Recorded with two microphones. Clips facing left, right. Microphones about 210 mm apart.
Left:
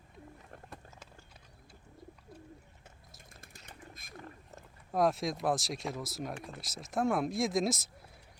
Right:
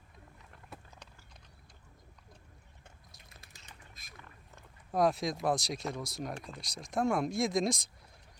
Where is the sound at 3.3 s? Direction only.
55° left (ahead or behind).